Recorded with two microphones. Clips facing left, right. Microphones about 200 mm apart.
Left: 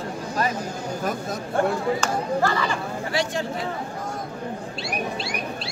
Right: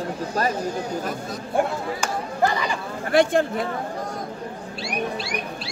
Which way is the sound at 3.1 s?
55° right (ahead or behind).